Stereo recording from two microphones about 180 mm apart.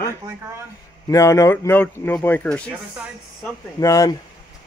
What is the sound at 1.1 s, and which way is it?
Speech, 15° left (ahead or behind).